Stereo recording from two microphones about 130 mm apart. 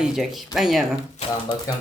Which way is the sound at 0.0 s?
5° right (ahead or behind).